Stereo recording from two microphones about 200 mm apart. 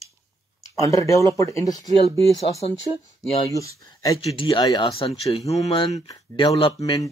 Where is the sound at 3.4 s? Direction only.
15° left (ahead or behind); by 6.0 s 30° left (ahead or behind).